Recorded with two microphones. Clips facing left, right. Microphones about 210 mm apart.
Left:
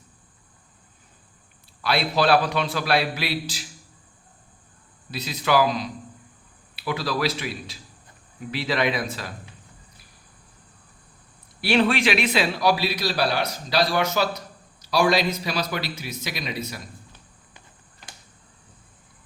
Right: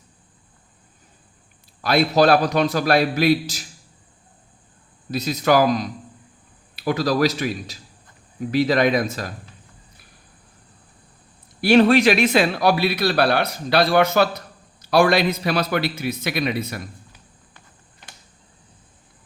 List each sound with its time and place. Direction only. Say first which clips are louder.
1.8 s a man's voice: right 6 dB; 45° right (ahead or behind)
5.1 s a man's voice: right 4 dB; 45° right (ahead or behind)
11.6 s a man's voice: right 7 dB; 45° right (ahead or behind)